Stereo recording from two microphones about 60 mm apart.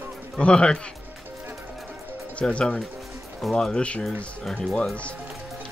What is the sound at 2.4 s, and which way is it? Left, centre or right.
Speech, centre.